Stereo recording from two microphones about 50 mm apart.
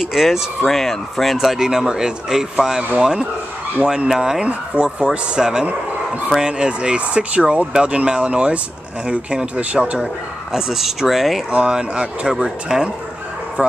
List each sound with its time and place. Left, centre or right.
0.0 s speech: centre
4.5 s speech: right
10.5 s speech: centre
11.5 s speech: right
13.6 s speech: right